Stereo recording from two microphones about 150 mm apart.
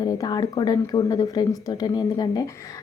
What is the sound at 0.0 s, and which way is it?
A woman's voice, 25° left (ahead or behind).